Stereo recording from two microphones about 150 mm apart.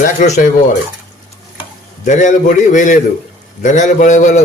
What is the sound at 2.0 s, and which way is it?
Speech, 55° left (ahead or behind).